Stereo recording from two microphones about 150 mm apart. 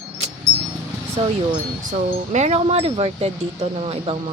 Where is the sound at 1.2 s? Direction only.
40° right (ahead or behind).